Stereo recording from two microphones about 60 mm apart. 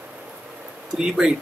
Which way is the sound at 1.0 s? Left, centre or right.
Centre.